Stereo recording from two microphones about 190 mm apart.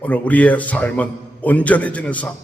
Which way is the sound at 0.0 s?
10° left (ahead or behind).